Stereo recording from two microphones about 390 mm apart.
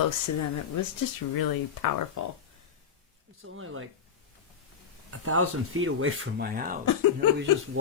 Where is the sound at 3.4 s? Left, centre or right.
Right.